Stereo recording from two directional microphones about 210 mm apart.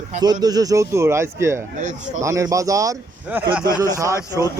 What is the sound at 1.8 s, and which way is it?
Speech, 35° right (ahead or behind).